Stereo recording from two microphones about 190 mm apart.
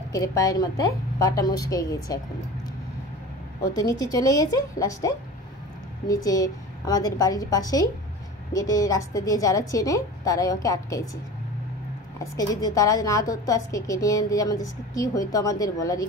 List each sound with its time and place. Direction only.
0.1 s a woman's voice: 15° left (ahead or behind)
3.6 s a woman's voice: 20° left (ahead or behind)
12.2 s a woman's voice: 20° left (ahead or behind)